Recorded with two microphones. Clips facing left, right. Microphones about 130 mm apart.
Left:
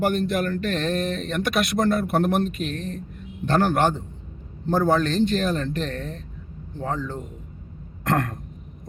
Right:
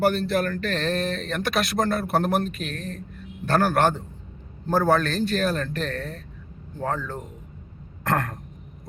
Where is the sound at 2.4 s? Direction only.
20° left (ahead or behind).